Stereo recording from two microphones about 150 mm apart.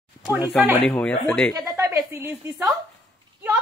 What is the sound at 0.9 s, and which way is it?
Speech, 10° left (ahead or behind).